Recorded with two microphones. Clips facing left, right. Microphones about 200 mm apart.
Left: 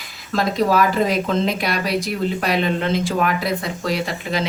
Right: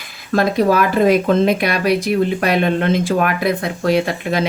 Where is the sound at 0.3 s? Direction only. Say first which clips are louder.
Right 4 dB; 55° right (ahead or behind).